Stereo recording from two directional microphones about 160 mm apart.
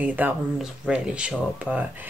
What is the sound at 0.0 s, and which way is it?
Speech, 10° right (ahead or behind).